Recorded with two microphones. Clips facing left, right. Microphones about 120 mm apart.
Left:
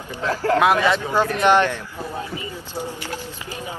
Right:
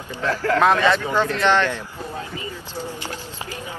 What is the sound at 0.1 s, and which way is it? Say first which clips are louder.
Speech: left 1 dB; 15° left (ahead or behind).